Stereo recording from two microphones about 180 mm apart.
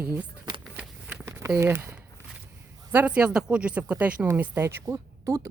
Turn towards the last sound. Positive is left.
turn(degrees=-20)  # may be behind; listen again after turning